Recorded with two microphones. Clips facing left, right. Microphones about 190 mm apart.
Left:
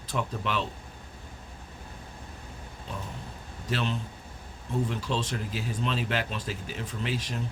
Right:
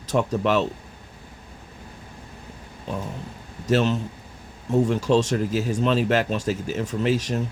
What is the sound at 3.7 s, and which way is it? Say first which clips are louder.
Speech: right 10 dB; 45° right (ahead or behind).